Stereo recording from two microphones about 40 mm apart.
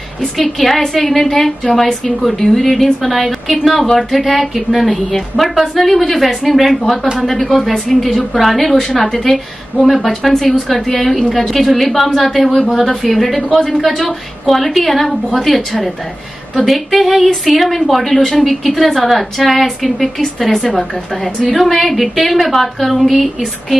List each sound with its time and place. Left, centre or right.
0.2 s a woman's voice: centre